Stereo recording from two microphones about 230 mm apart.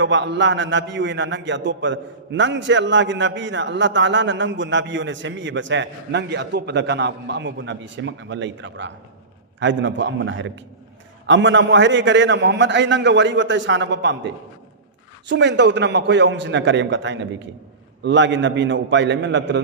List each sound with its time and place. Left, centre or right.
0.0 s a man's voice: right